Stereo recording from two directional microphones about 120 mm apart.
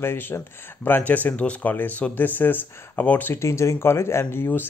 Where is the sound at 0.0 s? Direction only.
20° left (ahead or behind).